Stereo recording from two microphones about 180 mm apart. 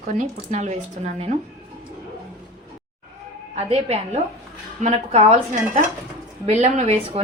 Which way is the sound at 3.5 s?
35° right (ahead or behind).